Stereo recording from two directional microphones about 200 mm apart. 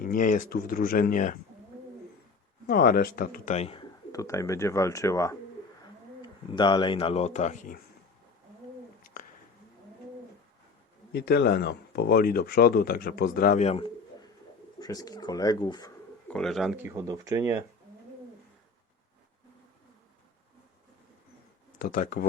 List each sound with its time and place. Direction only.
0.0 s speech: 45° left (ahead or behind)
2.6 s speech: 50° left (ahead or behind); by 3.8 s 30° left (ahead or behind)
4.1 s speech: 15° left (ahead or behind); by 7.8 s 35° left (ahead or behind)
11.1 s speech: 55° left (ahead or behind)
13.7 s bird: 25° left (ahead or behind)
14.8 s speech: 20° left (ahead or behind)
16.3 s speech: centre (ahead or behind); by 17.6 s 15° right (ahead or behind)
21.8 s speech: 45° left (ahead or behind)